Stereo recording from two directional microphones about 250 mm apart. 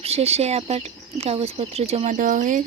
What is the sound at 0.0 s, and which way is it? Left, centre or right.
Speech, right.